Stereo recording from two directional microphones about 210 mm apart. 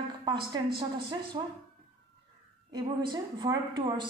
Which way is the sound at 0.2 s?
20° right (ahead or behind).